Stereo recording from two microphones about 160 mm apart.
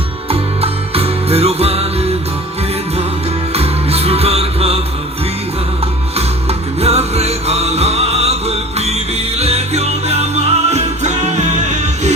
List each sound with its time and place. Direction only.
0.3 s music: 35° right (ahead or behind)
3.5 s music: 40° right (ahead or behind)
6.1 s music: 40° right (ahead or behind)